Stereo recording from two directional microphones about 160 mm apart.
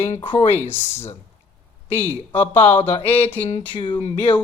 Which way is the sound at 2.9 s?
40° left (ahead or behind).